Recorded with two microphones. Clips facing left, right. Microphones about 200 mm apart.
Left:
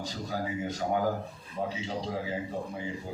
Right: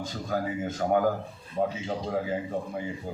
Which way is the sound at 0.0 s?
50° right (ahead or behind).